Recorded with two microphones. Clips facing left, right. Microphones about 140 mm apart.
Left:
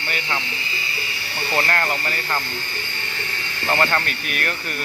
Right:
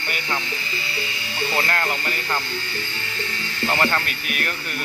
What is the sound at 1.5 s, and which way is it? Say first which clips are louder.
Speech: left 3 dB; 5° right (ahead or behind).